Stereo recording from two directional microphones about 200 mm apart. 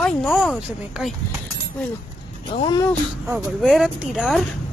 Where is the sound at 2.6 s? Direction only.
20° left (ahead or behind).